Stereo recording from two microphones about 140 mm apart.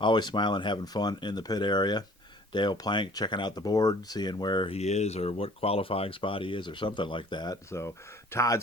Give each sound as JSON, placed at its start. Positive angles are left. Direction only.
{"t": 0.0, "sound": "speech", "side_deg": 30}
{"t": 4.8, "sound": "speech", "side_deg": 55}